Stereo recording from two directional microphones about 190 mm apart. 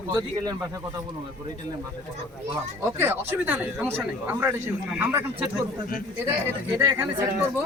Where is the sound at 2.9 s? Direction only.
10° right (ahead or behind).